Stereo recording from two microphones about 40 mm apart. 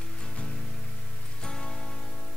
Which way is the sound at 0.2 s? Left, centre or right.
Centre.